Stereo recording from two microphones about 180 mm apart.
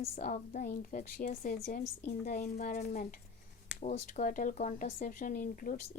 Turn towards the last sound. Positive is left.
turn(degrees=45)  # may be behind; listen again after turning